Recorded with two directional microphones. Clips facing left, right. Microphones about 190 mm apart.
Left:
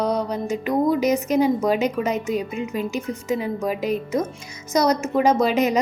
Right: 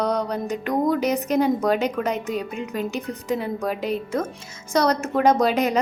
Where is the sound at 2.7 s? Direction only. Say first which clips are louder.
Even; 35° right (ahead or behind).